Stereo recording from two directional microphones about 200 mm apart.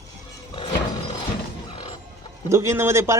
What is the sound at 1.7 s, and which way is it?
Cluck, 25° left (ahead or behind).